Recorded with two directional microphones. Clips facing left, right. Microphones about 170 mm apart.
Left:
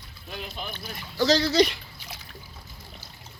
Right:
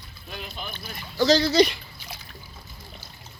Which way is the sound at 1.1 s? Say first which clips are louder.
Right 2 dB; centre (ahead or behind).